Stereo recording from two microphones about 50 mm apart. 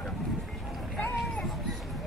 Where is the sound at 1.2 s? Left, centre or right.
Centre.